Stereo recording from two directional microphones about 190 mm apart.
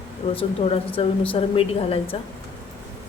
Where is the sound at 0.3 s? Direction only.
30° left (ahead or behind).